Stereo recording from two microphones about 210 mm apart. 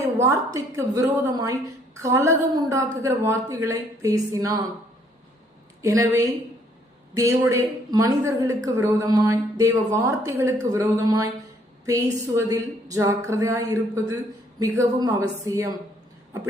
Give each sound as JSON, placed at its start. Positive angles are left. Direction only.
{"t": 0.2, "sound": "a woman's voice", "side_deg": -15}
{"t": 5.8, "sound": "a woman's voice", "side_deg": -15}
{"t": 12.4, "sound": "a woman's voice", "side_deg": -15}